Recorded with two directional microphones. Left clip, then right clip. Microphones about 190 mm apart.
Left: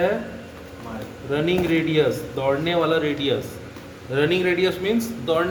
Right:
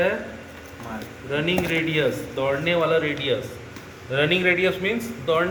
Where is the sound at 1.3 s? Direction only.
65° left (ahead or behind).